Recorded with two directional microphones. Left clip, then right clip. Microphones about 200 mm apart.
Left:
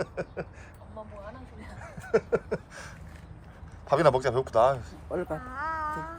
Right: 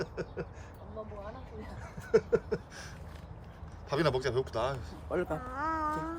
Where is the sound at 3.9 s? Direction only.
5° right (ahead or behind).